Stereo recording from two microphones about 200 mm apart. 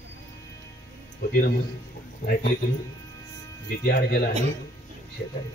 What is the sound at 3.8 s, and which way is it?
Speech, 50° left (ahead or behind).